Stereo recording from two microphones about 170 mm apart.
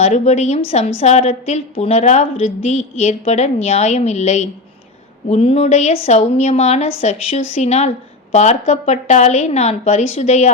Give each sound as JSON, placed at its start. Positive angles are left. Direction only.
{"t": 0.0, "sound": "a woman's voice", "side_deg": 40}